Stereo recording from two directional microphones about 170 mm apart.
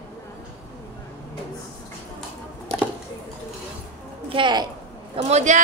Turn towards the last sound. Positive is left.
turn(degrees=-40)  # may be behind; listen again after turning